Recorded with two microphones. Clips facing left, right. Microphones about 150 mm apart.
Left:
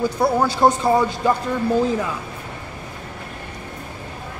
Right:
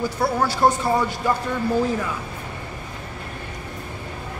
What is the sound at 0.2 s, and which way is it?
Speech, 20° left (ahead or behind).